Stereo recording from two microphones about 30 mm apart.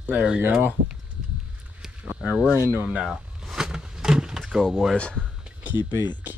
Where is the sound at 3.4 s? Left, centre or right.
Centre.